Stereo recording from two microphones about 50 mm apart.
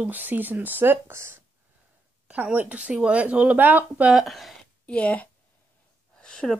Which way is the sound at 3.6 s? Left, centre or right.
Right.